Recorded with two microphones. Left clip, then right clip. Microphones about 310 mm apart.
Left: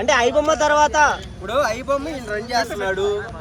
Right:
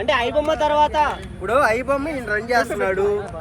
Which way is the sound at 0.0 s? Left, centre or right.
Left.